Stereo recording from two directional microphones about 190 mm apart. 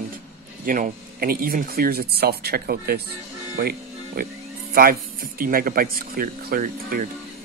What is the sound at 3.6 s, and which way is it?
Music, 50° right (ahead or behind).